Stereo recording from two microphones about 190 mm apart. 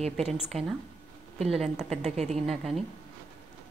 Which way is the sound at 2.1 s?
35° right (ahead or behind).